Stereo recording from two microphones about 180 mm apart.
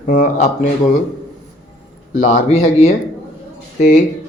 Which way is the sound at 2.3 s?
35° left (ahead or behind).